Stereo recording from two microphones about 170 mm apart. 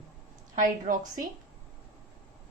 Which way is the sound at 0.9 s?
55° right (ahead or behind).